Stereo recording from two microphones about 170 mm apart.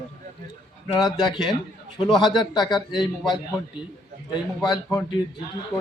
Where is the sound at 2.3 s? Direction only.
25° left (ahead or behind).